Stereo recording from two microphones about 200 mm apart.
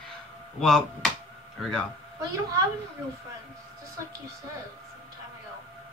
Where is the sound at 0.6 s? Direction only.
Centre (ahead or behind).